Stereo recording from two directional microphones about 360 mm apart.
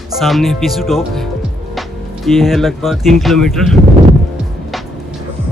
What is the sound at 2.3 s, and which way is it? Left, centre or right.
Speech, centre.